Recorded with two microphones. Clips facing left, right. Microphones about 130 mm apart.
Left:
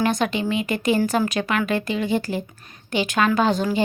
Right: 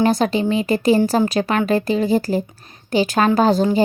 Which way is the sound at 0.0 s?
35° right (ahead or behind).